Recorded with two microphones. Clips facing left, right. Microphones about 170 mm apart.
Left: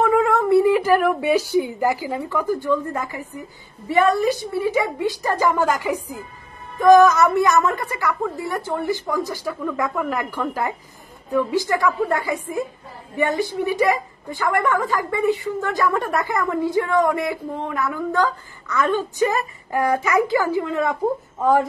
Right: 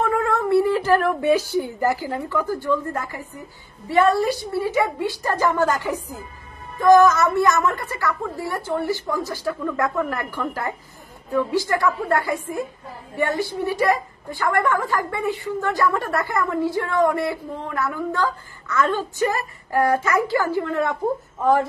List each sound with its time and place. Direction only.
0.0 s a woman's voice: 20° left (ahead or behind)